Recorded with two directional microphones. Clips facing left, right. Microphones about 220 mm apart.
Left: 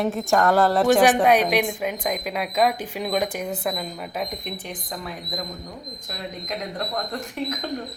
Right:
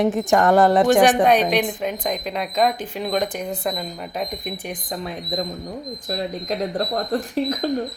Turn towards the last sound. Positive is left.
turn(degrees=-35)  # may be behind; listen again after turning